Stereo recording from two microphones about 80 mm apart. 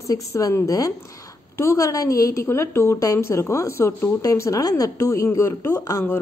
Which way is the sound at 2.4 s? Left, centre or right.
Left.